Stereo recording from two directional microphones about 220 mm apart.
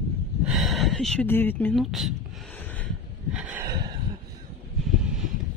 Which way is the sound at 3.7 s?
20° right (ahead or behind).